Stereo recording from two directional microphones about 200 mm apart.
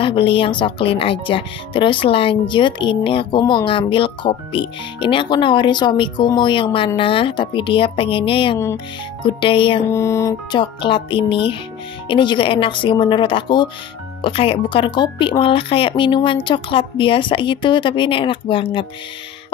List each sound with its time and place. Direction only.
0.0 s speech: 25° left (ahead or behind)
9.8 s speech: 15° left (ahead or behind)